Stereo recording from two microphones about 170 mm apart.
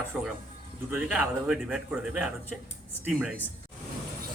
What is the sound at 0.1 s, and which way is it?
A man's voice, 5° right (ahead or behind).